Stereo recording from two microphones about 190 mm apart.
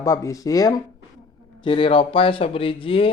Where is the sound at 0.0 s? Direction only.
15° left (ahead or behind).